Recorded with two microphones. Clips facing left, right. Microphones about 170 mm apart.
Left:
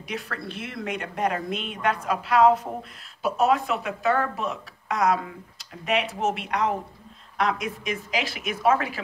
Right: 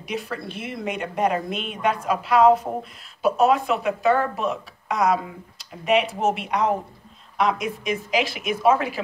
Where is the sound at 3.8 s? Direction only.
15° right (ahead or behind).